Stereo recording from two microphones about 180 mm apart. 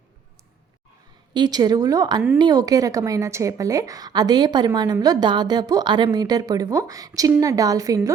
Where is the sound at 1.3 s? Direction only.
25° right (ahead or behind).